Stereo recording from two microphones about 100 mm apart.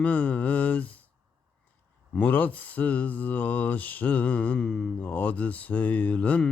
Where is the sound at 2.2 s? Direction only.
15° left (ahead or behind).